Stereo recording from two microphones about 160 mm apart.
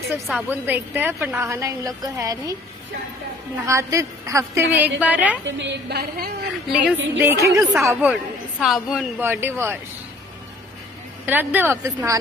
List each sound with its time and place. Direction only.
0.5 s a woman's voice: 10° right (ahead or behind)
3.6 s a woman's voice: 20° right (ahead or behind)
5.6 s a woman's voice: 85° right
6.7 s a woman's voice: 5° right (ahead or behind)
9.2 s a woman's voice: 15° right (ahead or behind)
11.2 s a woman's voice: 10° right (ahead or behind)